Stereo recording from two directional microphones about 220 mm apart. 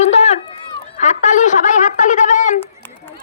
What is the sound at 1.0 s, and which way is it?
Speech, 35° left (ahead or behind).